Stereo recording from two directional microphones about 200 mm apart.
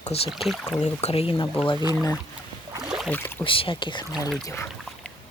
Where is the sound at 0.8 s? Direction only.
30° left (ahead or behind).